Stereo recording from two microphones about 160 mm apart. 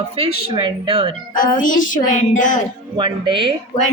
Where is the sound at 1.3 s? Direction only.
55° left (ahead or behind).